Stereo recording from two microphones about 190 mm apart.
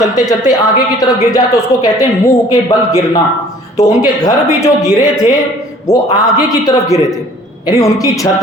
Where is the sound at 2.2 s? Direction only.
15° left (ahead or behind).